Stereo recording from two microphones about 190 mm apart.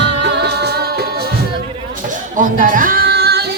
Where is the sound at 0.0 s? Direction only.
60° right (ahead or behind).